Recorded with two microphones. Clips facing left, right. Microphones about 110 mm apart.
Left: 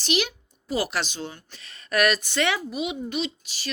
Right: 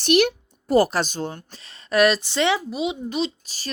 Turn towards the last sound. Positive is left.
turn(degrees=-35)  # may be behind; listen again after turning